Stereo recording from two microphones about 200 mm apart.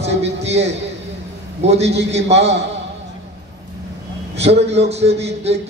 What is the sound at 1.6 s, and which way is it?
Speech, 30° right (ahead or behind).